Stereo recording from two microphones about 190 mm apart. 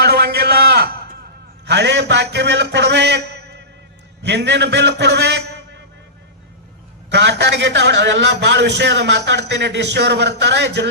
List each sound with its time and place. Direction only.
0.0 s a sound: 60° right (ahead or behind)
1.6 s a man's voice: 65° right (ahead or behind)
7.1 s a man's voice: 65° right (ahead or behind)